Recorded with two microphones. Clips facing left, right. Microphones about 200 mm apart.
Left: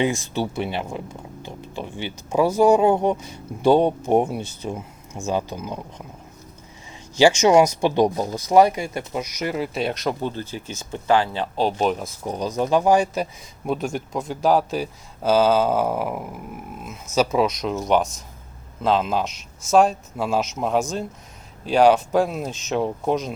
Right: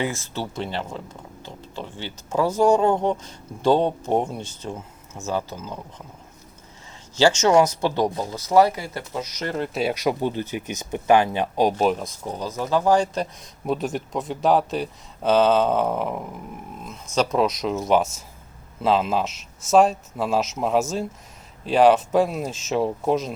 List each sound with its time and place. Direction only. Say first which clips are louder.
0.0 s speech: left 5 dB; 15° left (ahead or behind)
7.2 s speech: left 2 dB; 10° left (ahead or behind)
9.7 s speech: right 1 dB; 5° right (ahead or behind)
11.9 s speech: right 1 dB; 5° left (ahead or behind)
12.2 s speech: left 9 dB; 15° left (ahead or behind); by 23.3 s centre (ahead or behind)